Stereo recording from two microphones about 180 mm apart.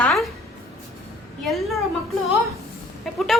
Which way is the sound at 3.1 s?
Centre (ahead or behind).